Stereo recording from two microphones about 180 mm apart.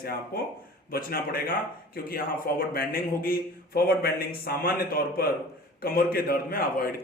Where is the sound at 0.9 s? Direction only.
55° left (ahead or behind).